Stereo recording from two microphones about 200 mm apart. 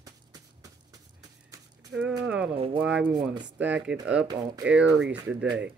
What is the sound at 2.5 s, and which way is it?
Speech, 30° right (ahead or behind).